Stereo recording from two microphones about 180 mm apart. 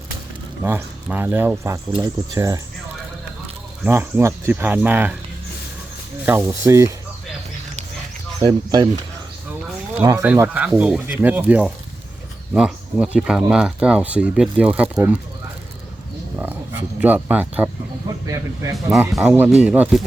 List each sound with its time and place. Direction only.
0.6 s speech: 10° right (ahead or behind)
3.8 s speech: 15° right (ahead or behind)
6.2 s speech: 15° right (ahead or behind)
8.4 s speech: 20° right (ahead or behind)
10.0 s speech: 20° right (ahead or behind)
17.0 s speech: 10° right (ahead or behind)
18.9 s speech: 5° right (ahead or behind)